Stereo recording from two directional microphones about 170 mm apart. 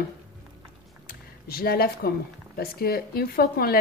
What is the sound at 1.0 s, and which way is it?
Speech, 60° left (ahead or behind).